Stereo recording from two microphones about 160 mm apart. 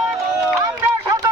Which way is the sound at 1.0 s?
20° right (ahead or behind).